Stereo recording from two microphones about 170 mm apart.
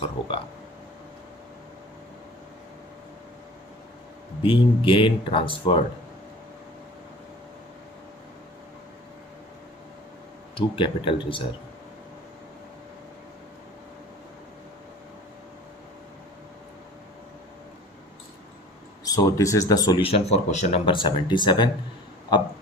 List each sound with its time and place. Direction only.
4.4 s speech: 30° left (ahead or behind)
10.5 s speech: 30° left (ahead or behind)
19.0 s speech: 20° left (ahead or behind)
20.1 s speech: 35° left (ahead or behind)
20.8 s speech: 30° left (ahead or behind)